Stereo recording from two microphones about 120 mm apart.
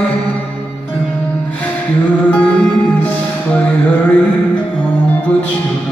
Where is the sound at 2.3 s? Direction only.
10° left (ahead or behind).